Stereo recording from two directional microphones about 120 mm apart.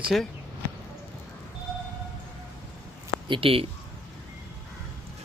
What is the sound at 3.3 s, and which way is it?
Speech, 50° right (ahead or behind).